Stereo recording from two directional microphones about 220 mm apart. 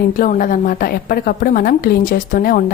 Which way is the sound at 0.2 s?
40° left (ahead or behind).